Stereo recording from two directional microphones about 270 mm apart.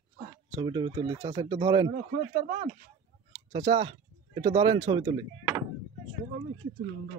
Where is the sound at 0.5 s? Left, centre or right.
Centre.